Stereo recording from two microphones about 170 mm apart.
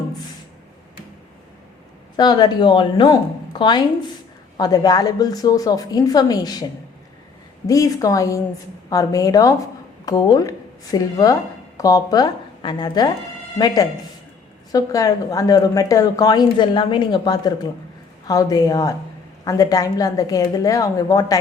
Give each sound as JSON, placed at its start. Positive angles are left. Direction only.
{"t": 2.1, "sound": "a woman's voice", "side_deg": 25}
{"t": 7.7, "sound": "a woman's voice", "side_deg": 20}
{"t": 14.7, "sound": "a woman's voice", "side_deg": 20}